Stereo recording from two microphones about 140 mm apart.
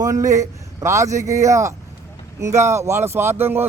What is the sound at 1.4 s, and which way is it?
Speech, 20° right (ahead or behind).